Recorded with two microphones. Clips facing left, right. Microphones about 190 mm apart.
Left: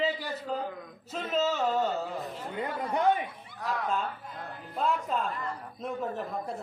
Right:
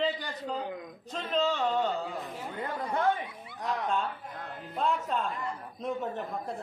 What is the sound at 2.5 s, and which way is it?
Chatter, 20° left (ahead or behind).